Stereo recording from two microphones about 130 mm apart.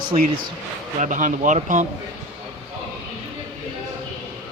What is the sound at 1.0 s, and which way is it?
Speech, 75° right (ahead or behind).